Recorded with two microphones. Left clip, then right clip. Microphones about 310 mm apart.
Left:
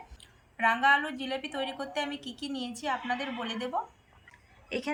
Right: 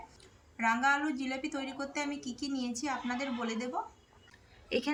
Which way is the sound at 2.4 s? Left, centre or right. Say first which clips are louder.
Even; centre.